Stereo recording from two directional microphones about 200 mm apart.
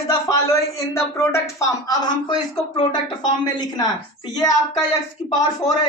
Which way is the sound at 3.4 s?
20° left (ahead or behind).